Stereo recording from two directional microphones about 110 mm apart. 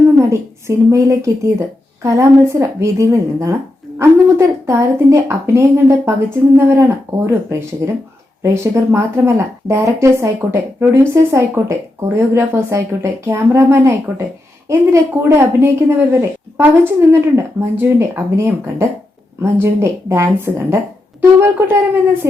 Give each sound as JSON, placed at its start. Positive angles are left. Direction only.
{"t": 0.9, "sound": "a woman's voice", "side_deg": -30}